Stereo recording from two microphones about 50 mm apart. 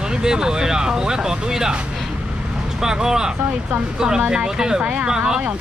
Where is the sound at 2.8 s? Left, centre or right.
Centre.